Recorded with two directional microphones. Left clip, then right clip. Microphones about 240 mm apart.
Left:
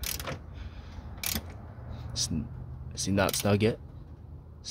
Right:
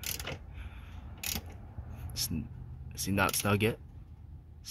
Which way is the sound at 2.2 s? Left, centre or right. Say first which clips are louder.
Left 4 dB; centre.